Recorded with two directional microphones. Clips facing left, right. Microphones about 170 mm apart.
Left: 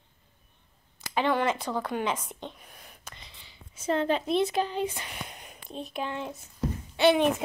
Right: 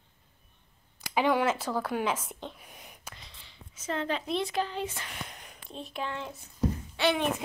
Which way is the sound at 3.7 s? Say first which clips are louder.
Left 6 dB; 30° left (ahead or behind).